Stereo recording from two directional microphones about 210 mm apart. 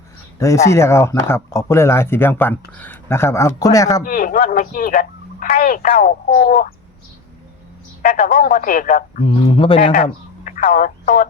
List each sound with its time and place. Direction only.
0.3 s speech: 15° left (ahead or behind)
4.0 s speech: 40° left (ahead or behind)
8.0 s speech: 40° left (ahead or behind)
9.2 s speech: 25° left (ahead or behind)
10.0 s speech: 40° left (ahead or behind)